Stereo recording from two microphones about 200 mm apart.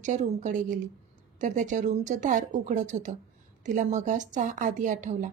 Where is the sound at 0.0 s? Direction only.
40° right (ahead or behind).